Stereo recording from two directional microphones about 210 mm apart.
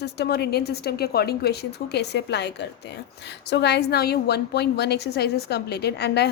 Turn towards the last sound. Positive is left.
turn(degrees=55)  # may be behind; listen again after turning